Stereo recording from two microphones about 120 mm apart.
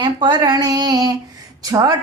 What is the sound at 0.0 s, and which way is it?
Female singing, 40° right (ahead or behind).